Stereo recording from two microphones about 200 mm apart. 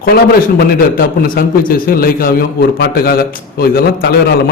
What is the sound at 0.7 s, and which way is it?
A man's voice, 45° left (ahead or behind).